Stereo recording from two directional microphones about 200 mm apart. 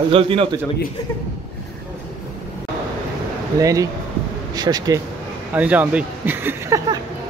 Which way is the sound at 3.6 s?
15° right (ahead or behind).